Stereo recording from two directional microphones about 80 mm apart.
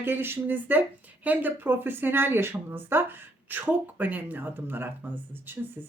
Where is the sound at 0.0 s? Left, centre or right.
Right.